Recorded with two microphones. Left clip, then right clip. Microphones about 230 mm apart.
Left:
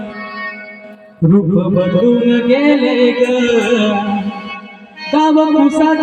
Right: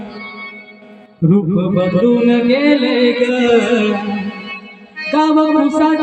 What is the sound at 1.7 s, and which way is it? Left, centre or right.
Music, left.